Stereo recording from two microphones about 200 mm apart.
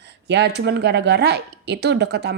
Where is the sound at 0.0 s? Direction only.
60° right (ahead or behind).